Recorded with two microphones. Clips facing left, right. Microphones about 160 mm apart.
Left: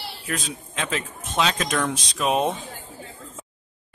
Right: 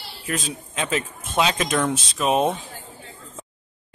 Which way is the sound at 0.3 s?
Centre (ahead or behind).